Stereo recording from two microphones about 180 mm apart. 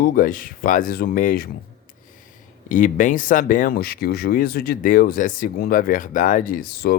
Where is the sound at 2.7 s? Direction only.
45° left (ahead or behind).